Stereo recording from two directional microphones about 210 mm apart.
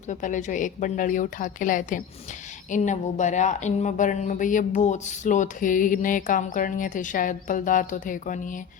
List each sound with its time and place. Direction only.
0.1 s speech: 35° left (ahead or behind)